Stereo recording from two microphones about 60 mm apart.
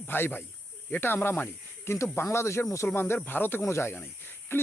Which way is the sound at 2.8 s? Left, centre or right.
Left.